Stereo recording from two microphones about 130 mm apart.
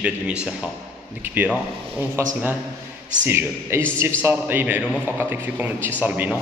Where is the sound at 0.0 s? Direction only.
10° right (ahead or behind).